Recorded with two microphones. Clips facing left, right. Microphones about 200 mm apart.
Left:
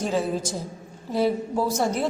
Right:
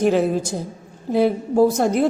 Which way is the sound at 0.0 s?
60° right (ahead or behind).